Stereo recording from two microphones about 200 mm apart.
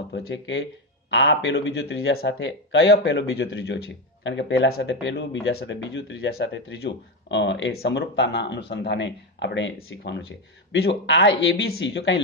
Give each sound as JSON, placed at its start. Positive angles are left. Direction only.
{"t": 0.1, "sound": "speech", "side_deg": 65}